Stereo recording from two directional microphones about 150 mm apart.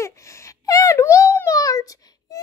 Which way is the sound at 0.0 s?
20° left (ahead or behind).